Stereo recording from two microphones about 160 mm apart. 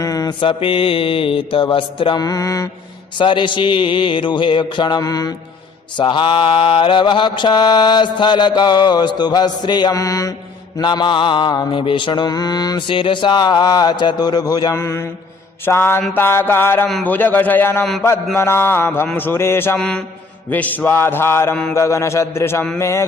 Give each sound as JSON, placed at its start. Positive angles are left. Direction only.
{"t": 0.0, "sound": "mantra", "side_deg": 20}